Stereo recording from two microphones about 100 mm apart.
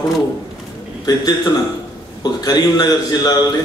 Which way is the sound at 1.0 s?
40° left (ahead or behind).